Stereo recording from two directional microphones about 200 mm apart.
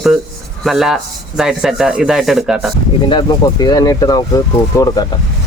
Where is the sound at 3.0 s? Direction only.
25° left (ahead or behind).